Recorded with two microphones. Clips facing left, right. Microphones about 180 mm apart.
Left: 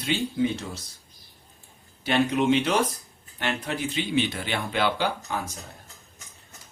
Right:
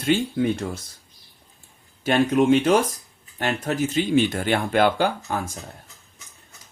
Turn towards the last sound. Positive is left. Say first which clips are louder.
# right 3 dB
turn(degrees=-50)  # may be behind; listen again after turning